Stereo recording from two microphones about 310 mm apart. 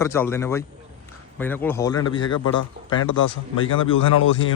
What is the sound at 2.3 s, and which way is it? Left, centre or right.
Speech, left.